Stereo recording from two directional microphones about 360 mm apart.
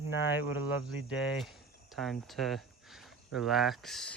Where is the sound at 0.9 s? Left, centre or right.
Centre.